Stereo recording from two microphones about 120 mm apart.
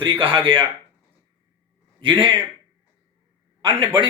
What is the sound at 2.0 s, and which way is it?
Speech, 40° right (ahead or behind).